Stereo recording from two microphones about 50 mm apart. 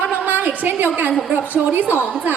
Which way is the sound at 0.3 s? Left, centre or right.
Right.